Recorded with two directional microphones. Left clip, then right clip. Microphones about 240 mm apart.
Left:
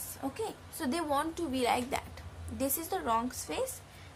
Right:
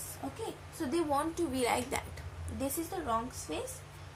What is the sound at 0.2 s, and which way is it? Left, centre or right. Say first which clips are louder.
A woman's voice: left 4 dB; left.